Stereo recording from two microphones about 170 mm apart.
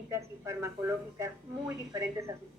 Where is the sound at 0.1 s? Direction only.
15° right (ahead or behind).